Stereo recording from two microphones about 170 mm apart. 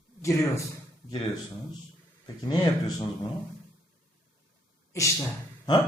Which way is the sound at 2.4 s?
20° left (ahead or behind).